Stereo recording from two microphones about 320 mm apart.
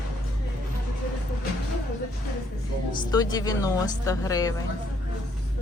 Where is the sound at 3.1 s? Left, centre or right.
Centre.